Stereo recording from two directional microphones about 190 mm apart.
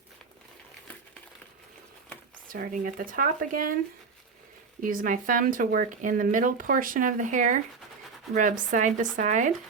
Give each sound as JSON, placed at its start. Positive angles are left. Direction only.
{"t": 2.5, "sound": "speech", "side_deg": -45}
{"t": 4.8, "sound": "speech", "side_deg": -45}